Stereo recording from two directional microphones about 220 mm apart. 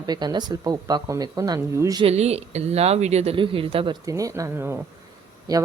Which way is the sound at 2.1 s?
30° right (ahead or behind).